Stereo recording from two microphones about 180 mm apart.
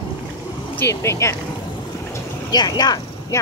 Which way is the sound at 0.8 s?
15° left (ahead or behind).